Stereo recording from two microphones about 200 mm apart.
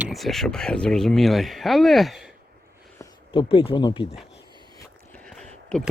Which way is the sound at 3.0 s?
25° left (ahead or behind).